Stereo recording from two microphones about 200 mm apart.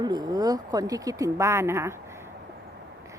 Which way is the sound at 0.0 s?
20° right (ahead or behind).